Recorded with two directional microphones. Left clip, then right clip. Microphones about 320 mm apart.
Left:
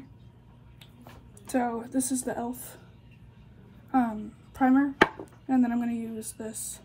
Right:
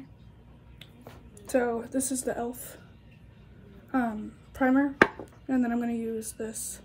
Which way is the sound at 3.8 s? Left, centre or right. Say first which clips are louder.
Left 3 dB; centre.